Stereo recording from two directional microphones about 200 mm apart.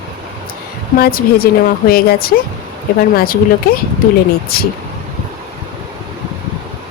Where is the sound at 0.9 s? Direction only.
50° left (ahead or behind).